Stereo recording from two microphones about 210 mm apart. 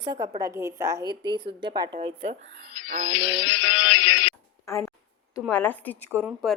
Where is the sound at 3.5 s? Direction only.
80° left.